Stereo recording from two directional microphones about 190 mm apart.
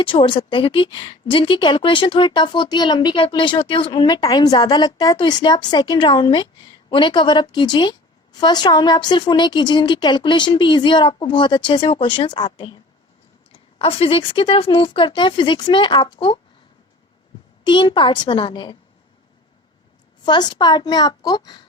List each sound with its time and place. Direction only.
0.0 s a woman's voice: 25° left (ahead or behind)
17.6 s a woman's voice: 25° left (ahead or behind)
20.2 s a woman's voice: 25° left (ahead or behind)